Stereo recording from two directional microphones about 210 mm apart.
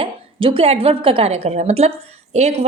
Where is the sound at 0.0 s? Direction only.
25° right (ahead or behind).